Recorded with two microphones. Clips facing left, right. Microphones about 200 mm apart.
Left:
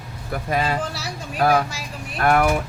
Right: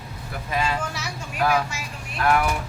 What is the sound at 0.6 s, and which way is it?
Speech, 35° left (ahead or behind).